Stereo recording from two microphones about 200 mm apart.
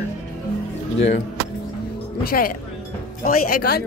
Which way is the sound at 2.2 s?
45° left (ahead or behind).